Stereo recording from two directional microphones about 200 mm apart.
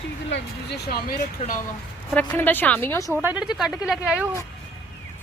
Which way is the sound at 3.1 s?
10° right (ahead or behind).